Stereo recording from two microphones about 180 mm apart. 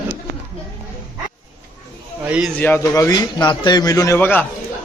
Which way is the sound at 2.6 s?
10° left (ahead or behind).